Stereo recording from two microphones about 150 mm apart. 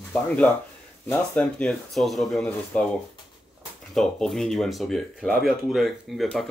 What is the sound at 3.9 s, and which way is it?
Speech, centre (ahead or behind).